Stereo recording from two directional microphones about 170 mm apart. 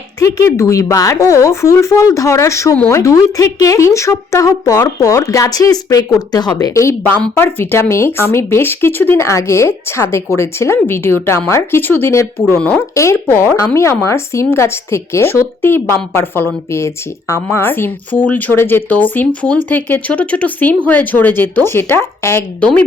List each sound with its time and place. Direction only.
0.2 s speech: 15° left (ahead or behind)
12.9 s speech: 15° left (ahead or behind)